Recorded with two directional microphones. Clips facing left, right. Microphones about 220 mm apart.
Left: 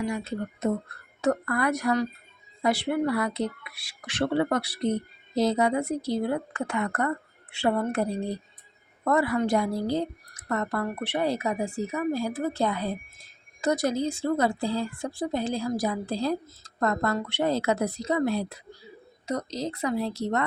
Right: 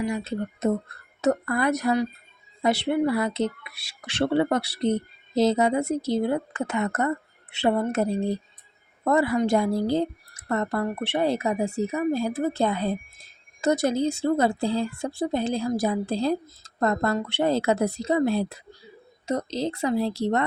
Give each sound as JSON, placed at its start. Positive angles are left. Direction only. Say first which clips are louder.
{"t": 0.1, "sound": "speech", "louder": "right 2 dB", "side_deg": -20}